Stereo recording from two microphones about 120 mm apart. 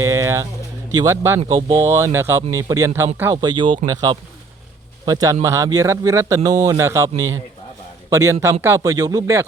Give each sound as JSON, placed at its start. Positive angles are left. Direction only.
{"t": 0.0, "sound": "speech", "side_deg": -25}
{"t": 1.5, "sound": "speech", "side_deg": -50}
{"t": 1.8, "sound": "speech", "side_deg": -20}
{"t": 3.4, "sound": "speech", "side_deg": -40}
{"t": 8.1, "sound": "speech", "side_deg": -25}